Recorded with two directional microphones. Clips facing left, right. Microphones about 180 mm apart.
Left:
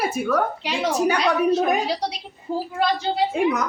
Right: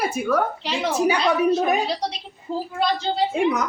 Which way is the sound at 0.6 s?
15° left (ahead or behind).